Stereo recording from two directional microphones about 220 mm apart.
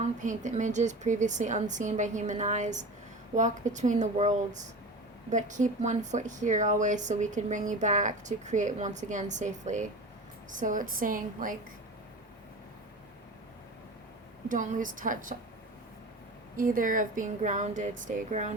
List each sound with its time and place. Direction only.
0.0 s speech: 35° right (ahead or behind)
14.4 s speech: 35° right (ahead or behind)
16.6 s speech: 40° right (ahead or behind)